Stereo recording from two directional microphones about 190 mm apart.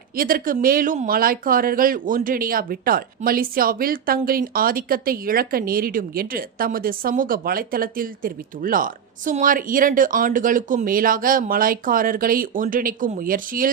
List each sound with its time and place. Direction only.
0.2 s speech: 50° right (ahead or behind)